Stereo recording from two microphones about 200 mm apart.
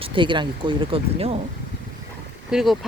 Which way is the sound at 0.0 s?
25° right (ahead or behind).